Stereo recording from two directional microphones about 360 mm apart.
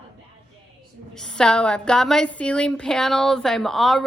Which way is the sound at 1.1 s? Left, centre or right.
Centre.